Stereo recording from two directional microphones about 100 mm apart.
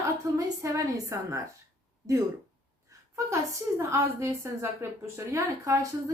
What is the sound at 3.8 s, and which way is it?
A woman's voice, 30° right (ahead or behind).